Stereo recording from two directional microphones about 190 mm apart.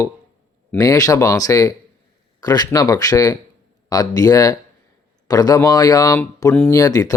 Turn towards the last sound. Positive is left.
turn(degrees=20)  # may be behind; listen again after turning